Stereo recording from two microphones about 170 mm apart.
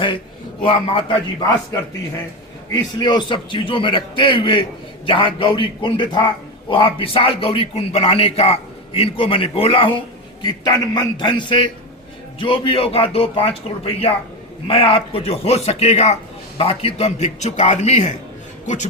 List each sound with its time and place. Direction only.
0.6 s a man's voice: 30° left (ahead or behind)
2.9 s a man's voice: 25° left (ahead or behind); by 18.9 s 45° left (ahead or behind)